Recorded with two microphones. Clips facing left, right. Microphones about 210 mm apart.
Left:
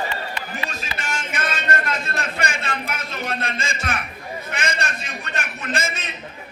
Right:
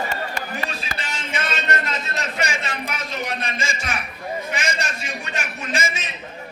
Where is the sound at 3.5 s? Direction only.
55° left (ahead or behind).